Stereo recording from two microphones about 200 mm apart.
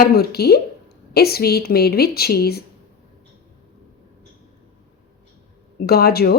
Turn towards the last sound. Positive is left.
turn(degrees=50)  # may be behind; listen again after turning